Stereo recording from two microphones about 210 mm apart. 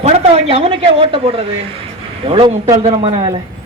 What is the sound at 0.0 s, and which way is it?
Speech, 30° right (ahead or behind).